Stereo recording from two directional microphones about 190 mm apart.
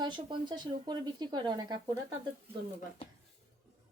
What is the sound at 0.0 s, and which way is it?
Speech, 25° right (ahead or behind).